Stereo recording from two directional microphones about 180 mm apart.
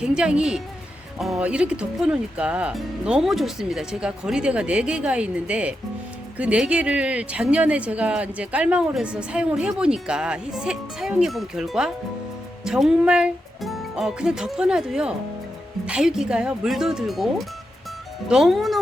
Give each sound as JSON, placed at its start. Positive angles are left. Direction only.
{"t": 0.0, "sound": "a woman's voice", "side_deg": -5}